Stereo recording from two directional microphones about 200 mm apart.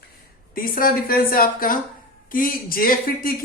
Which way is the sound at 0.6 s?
45° left (ahead or behind).